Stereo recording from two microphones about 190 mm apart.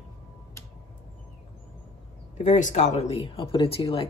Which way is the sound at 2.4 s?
40° left (ahead or behind).